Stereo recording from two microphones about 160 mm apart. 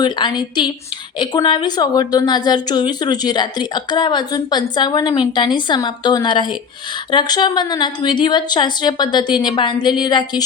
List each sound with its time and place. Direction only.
0.0 s a woman's voice: 25° left (ahead or behind)